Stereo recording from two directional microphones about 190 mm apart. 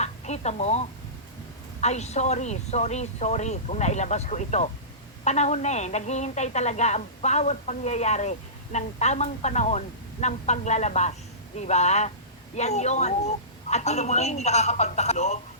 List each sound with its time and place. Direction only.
0.0 s a woman's voice: 35° left (ahead or behind)